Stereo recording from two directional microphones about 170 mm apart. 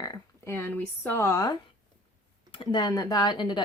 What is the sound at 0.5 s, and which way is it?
Speech, 10° left (ahead or behind).